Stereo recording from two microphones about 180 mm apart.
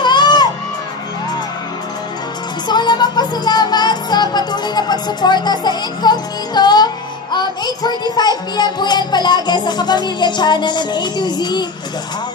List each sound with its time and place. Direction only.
0.0 s crowd: 25° left (ahead or behind)
2.7 s music: 25° left (ahead or behind)